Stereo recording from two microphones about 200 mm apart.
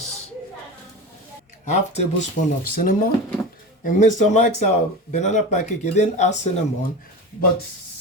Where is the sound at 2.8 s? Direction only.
45° left (ahead or behind).